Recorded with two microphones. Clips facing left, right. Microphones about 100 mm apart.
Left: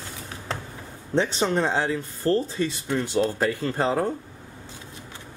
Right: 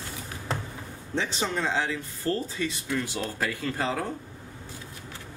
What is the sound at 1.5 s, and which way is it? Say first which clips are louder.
Speech: left 4 dB; 35° left (ahead or behind).